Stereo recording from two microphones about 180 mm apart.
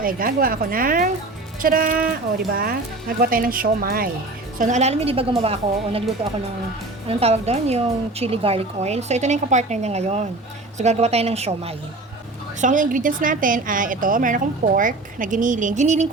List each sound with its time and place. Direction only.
0.0 s a woman's voice: 50° right (ahead or behind)
4.5 s a woman's voice: 45° right (ahead or behind)
7.1 s a woman's voice: 35° right (ahead or behind)